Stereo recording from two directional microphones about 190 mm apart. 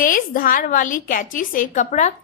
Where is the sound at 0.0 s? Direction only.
45° left (ahead or behind).